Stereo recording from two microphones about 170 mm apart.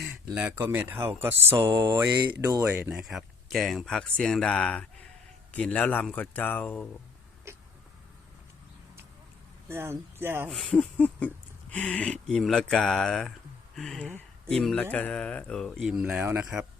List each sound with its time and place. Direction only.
0.0 s speech: 5° right (ahead or behind)
1.7 s mantra: 25° right (ahead or behind)
2.1 s speech: 15° right (ahead or behind)
3.0 s a man's voice: centre (ahead or behind)
7.5 s a sound: 15° right (ahead or behind)
9.6 s speech: 15° right (ahead or behind)
10.5 s a man's voice: 5° left (ahead or behind)
15.8 s speech: 5° right (ahead or behind)